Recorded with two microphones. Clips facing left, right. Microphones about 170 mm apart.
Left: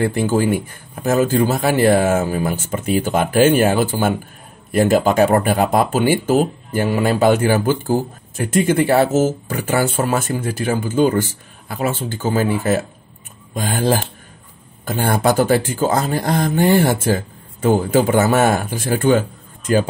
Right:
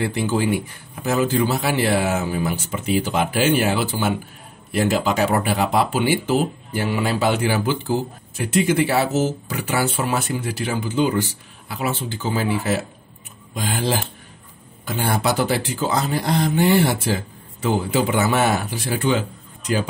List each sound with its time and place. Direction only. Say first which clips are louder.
0.0 s speech: left 4 dB; 50° left (ahead or behind)